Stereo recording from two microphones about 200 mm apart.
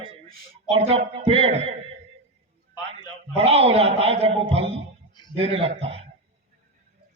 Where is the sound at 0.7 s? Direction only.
30° right (ahead or behind).